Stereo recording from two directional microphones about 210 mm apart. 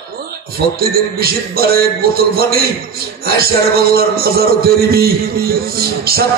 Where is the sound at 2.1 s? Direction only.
45° right (ahead or behind).